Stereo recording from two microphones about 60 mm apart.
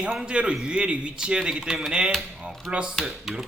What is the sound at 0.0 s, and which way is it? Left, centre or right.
A man's voice, centre.